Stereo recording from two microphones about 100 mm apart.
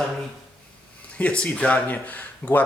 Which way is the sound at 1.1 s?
10° left (ahead or behind).